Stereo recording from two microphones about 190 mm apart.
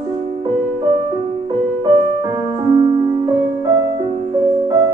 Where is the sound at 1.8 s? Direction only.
25° right (ahead or behind).